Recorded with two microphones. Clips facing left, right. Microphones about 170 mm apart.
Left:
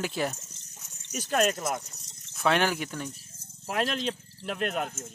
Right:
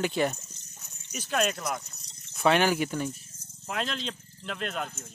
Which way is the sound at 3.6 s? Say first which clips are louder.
Left 4 dB; 10° left (ahead or behind).